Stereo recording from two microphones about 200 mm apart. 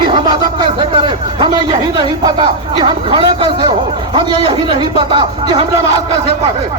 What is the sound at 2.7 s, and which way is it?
Speech, 20° right (ahead or behind).